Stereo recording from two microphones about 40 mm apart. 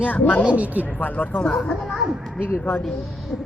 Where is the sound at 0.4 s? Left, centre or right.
Right.